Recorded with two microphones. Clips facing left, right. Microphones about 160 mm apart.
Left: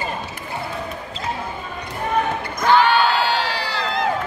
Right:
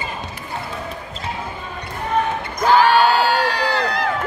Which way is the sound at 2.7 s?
40° right (ahead or behind).